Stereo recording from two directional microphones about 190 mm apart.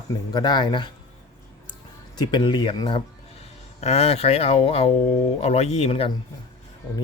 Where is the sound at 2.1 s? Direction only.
20° left (ahead or behind).